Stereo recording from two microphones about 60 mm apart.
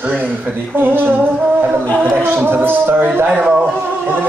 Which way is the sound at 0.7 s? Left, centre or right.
Right.